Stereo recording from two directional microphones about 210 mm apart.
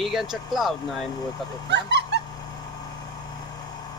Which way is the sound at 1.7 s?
55° right (ahead or behind).